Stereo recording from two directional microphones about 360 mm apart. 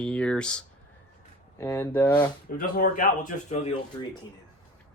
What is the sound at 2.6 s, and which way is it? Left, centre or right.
Speech, left.